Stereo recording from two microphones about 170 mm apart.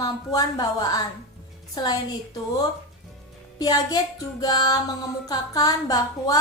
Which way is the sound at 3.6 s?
25° left (ahead or behind).